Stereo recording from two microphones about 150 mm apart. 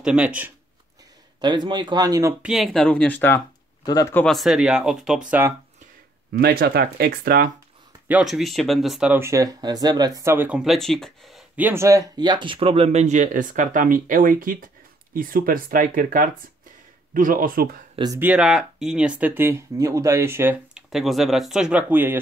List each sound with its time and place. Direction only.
0.0 s speech: 5° right (ahead or behind)
1.4 s speech: 30° right (ahead or behind)
2.4 s speech: centre (ahead or behind); by 3.4 s 15° left (ahead or behind)
3.8 s speech: 25° left (ahead or behind)
4.1 s speech: 5° left (ahead or behind)
6.4 s speech: 90° right
8.1 s speech: 5° right (ahead or behind)
9.1 s speech: 20° right (ahead or behind); by 11.6 s centre (ahead or behind)
11.6 s speech: 15° right (ahead or behind); by 17.8 s 70° right (ahead or behind)
17.9 s speech: 25° right (ahead or behind)
18.2 s speech: 5° right (ahead or behind)